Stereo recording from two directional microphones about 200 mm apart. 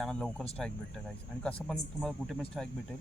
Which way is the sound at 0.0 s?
5° left (ahead or behind).